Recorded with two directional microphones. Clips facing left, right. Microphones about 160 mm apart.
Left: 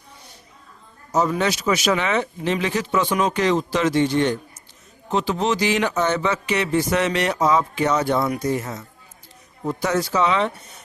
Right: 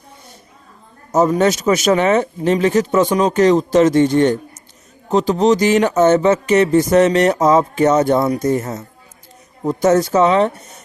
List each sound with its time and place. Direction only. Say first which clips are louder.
1.1 s speech: right 7 dB; 45° right (ahead or behind)